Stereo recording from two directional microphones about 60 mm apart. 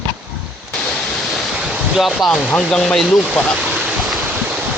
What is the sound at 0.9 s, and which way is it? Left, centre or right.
Waterfall, centre.